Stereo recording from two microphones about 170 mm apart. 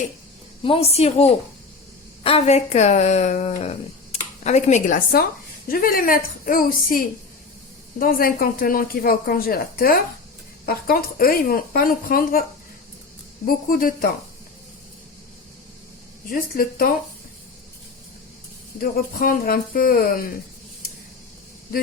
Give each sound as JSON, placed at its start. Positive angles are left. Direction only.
{"t": 0.6, "sound": "speech", "side_deg": 35}
{"t": 13.5, "sound": "speech", "side_deg": 55}
{"t": 16.3, "sound": "speech", "side_deg": 60}
{"t": 18.8, "sound": "speech", "side_deg": 55}